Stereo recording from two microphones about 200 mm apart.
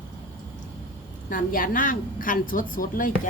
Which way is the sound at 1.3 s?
45° left (ahead or behind).